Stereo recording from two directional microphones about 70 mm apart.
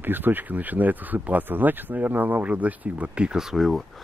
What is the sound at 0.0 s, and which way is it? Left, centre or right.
Speech, right.